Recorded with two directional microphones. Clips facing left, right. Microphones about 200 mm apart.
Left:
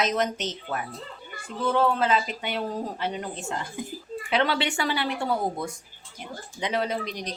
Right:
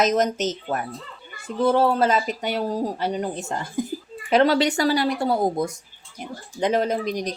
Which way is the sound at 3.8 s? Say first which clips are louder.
Right 8 dB; 40° right (ahead or behind).